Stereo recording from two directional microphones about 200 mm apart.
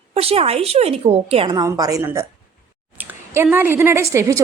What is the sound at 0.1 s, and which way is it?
A woman's voice, 30° right (ahead or behind).